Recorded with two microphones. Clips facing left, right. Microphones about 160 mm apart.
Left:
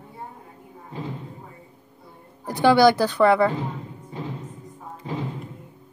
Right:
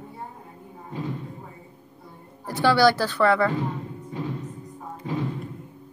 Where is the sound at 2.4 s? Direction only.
15° left (ahead or behind).